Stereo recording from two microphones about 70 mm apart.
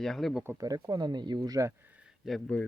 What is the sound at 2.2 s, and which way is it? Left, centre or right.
Speech, centre.